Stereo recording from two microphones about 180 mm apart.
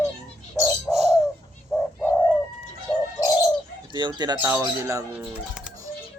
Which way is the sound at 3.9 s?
25° right (ahead or behind).